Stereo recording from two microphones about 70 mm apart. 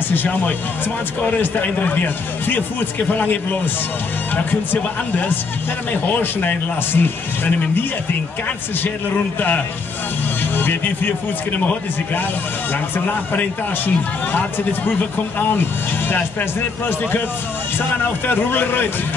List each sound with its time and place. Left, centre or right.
0.1 s speech: left
6.0 s speech: left
10.5 s speech: left
12.9 s speech: left
17.7 s speech: left